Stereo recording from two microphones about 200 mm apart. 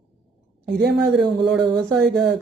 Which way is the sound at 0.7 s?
55° right (ahead or behind).